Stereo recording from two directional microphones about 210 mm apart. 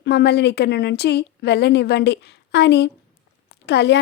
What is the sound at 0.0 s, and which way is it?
Speech, 55° left (ahead or behind).